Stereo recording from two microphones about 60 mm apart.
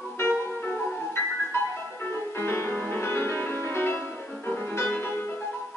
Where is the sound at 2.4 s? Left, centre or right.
Left.